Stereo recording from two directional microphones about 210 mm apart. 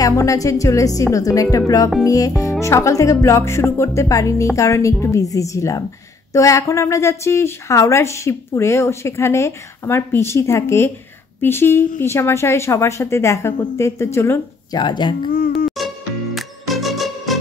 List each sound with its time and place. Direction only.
0.0 s a woman's voice: 15° left (ahead or behind)
15.3 s music: 45° left (ahead or behind)
16.3 s music: centre (ahead or behind)